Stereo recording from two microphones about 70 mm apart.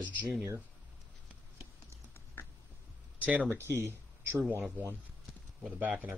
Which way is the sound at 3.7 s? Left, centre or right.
Right.